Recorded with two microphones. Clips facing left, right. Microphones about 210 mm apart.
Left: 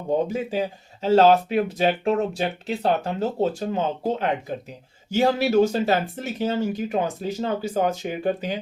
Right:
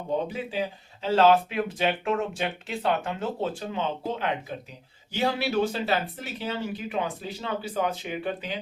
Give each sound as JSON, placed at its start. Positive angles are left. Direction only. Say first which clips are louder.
{"t": 0.3, "sound": "speech", "louder": "left 5 dB", "side_deg": 45}